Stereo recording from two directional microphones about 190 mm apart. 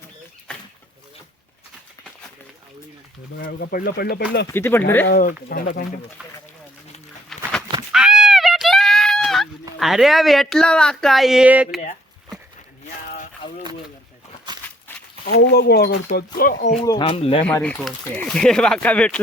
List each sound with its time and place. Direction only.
3.3 s speech: 50° left (ahead or behind)
4.4 s speech: 10° left (ahead or behind)
5.0 s speech: 50° left (ahead or behind)
7.3 s goat: centre (ahead or behind)
7.9 s a sound: 5° right (ahead or behind)
9.7 s speech: centre (ahead or behind)
14.5 s a sound: 20° right (ahead or behind)
15.3 s speech: 60° left (ahead or behind)
16.8 s speech: 20° left (ahead or behind)
17.4 s speech: 5° left (ahead or behind)